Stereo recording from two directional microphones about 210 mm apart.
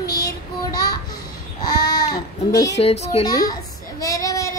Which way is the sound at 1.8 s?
20° left (ahead or behind).